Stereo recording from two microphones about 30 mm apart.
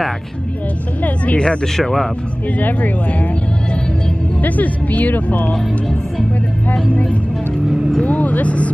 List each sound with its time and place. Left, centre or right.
1.0 s speech: left
1.8 s a man's voice: centre
2.6 s speech: left
4.4 s speech: left
6.9 s speech: left